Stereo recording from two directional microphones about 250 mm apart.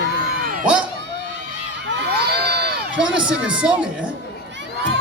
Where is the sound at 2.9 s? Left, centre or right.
Centre.